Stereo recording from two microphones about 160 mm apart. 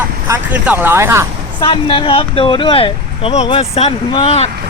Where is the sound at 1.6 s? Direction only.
35° left (ahead or behind).